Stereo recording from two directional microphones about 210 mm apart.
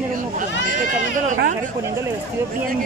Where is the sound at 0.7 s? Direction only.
40° right (ahead or behind).